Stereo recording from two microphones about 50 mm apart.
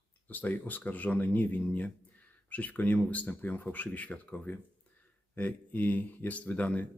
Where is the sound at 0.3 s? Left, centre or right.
Left.